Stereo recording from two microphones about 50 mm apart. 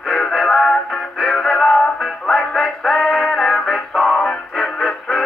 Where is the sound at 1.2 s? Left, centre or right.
Centre.